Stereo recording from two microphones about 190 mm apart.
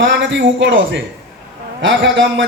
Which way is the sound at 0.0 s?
75° right (ahead or behind).